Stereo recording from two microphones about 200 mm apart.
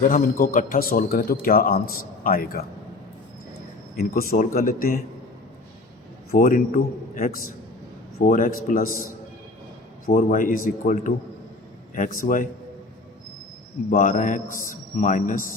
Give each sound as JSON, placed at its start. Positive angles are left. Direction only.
{"t": 0.1, "sound": "a man's voice", "side_deg": 40}
{"t": 3.9, "sound": "a man's voice", "side_deg": 45}
{"t": 6.3, "sound": "a man's voice", "side_deg": 45}
{"t": 10.1, "sound": "a man's voice", "side_deg": 40}
{"t": 13.9, "sound": "a man's voice", "side_deg": 40}